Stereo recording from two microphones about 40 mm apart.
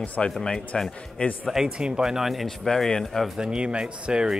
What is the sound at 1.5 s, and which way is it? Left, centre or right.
Speech, centre.